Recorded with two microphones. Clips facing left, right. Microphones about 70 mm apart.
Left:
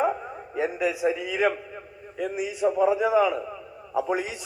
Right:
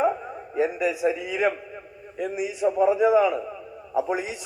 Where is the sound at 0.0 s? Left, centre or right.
Centre.